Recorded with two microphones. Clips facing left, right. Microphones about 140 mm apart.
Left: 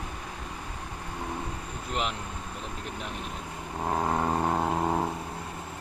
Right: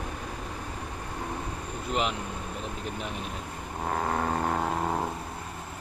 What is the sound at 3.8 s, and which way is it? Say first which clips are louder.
Vehicle: left 1 dB; 20° left (ahead or behind).